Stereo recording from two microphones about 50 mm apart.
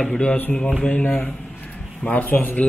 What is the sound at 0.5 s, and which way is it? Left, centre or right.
Speech, centre.